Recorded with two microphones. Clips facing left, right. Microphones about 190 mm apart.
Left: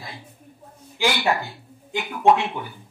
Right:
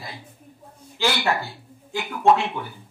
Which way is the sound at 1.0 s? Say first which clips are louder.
Left 1 dB; 15° left (ahead or behind).